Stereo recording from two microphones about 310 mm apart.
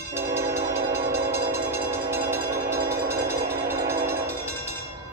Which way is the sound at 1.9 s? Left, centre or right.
Centre.